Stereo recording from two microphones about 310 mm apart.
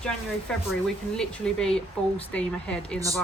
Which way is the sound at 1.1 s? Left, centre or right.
Centre.